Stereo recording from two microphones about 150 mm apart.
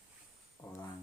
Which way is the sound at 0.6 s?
10° left (ahead or behind).